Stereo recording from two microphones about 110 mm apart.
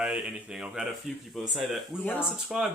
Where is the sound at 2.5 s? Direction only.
5° right (ahead or behind).